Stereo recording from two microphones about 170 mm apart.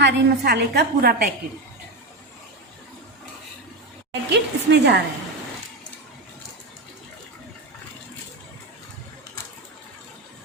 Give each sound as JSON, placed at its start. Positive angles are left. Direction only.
{"t": 0.0, "sound": "a woman's voice", "side_deg": -75}
{"t": 4.3, "sound": "a woman's voice", "side_deg": -90}